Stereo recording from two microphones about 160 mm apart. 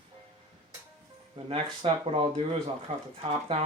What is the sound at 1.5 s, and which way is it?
Speech, 40° right (ahead or behind).